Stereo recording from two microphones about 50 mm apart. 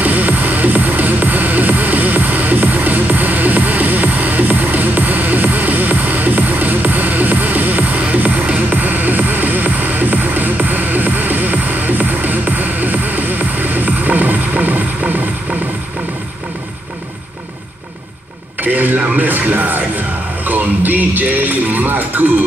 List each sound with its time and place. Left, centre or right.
0.0 s music: right
18.6 s a sound: right
20.4 s speech: right